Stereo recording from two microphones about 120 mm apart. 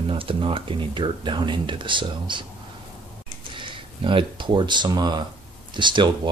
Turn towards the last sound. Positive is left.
turn(degrees=-40)  # may be behind; listen again after turning